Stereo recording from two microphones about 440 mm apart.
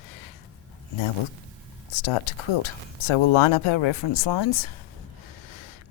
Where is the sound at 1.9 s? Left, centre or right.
Left.